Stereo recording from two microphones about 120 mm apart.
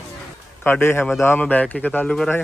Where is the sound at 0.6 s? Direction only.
20° left (ahead or behind).